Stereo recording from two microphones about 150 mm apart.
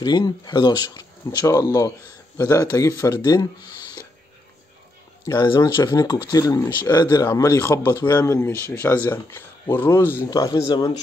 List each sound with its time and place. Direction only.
0.0 s speech: 30° left (ahead or behind)
5.2 s speech: 30° left (ahead or behind)